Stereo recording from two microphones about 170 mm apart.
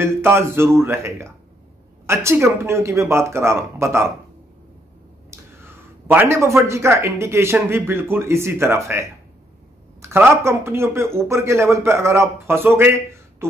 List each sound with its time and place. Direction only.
0.0 s speech: 15° right (ahead or behind)
5.3 s speech: 15° right (ahead or behind)
10.0 s speech: 15° right (ahead or behind)